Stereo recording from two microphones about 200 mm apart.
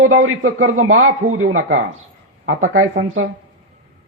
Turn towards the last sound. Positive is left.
turn(degrees=-90)